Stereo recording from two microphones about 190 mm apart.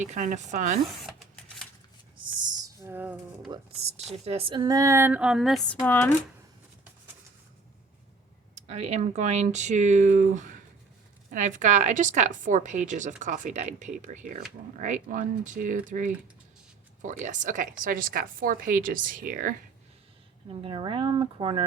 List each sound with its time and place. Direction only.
0.0 s speech: 40° right (ahead or behind)
1.0 s a sound: centre (ahead or behind)
2.1 s a sound: 25° right (ahead or behind)
2.8 s roaring cats: 10° right (ahead or behind)
3.5 s speech: 35° right (ahead or behind); by 6.1 s 10° left (ahead or behind)
8.5 s a woman's voice: 35° right (ahead or behind)
20.5 s speech: 25° right (ahead or behind)